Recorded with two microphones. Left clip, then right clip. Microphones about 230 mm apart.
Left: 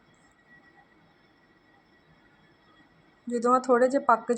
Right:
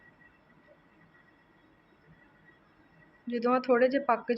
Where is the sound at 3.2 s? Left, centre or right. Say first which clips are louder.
Left 4 dB; centre.